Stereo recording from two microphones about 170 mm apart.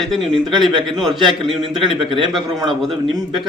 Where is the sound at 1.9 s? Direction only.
30° right (ahead or behind).